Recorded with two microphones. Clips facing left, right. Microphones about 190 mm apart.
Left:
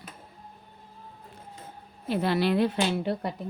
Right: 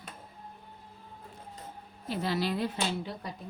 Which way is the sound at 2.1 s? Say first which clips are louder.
Left 6 dB; 60° left (ahead or behind).